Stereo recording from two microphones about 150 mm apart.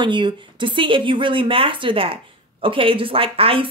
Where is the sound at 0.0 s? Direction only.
30° right (ahead or behind).